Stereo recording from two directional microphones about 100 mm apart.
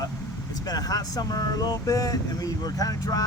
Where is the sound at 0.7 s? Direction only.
35° left (ahead or behind).